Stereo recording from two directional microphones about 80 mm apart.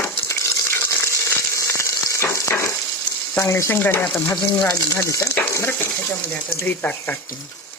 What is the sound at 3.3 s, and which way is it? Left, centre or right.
Speech, left.